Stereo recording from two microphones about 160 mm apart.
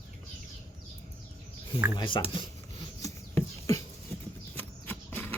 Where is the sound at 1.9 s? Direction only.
30° left (ahead or behind).